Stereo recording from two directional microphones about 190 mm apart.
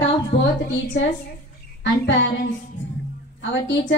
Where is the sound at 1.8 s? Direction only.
75° left (ahead or behind).